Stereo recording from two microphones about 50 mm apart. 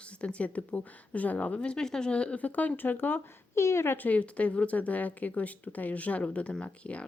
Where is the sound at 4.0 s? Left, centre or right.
Left.